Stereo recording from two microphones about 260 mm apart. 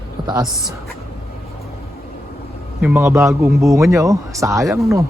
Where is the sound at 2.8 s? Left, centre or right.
Centre.